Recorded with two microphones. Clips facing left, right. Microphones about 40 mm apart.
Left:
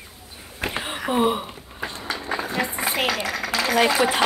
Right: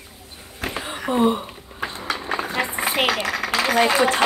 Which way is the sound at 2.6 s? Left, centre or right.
Centre.